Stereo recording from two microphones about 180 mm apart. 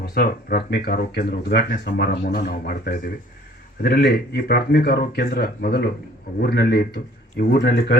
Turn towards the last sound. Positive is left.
turn(degrees=65)  # may be behind; listen again after turning